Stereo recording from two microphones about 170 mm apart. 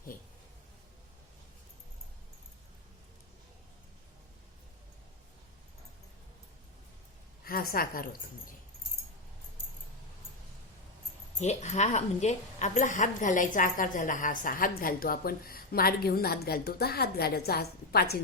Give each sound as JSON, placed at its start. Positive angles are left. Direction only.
{"t": 7.4, "sound": "a woman's voice", "side_deg": 60}
{"t": 11.3, "sound": "a woman's voice", "side_deg": 45}